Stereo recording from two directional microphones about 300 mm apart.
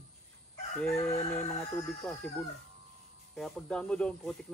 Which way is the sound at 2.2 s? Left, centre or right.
Centre.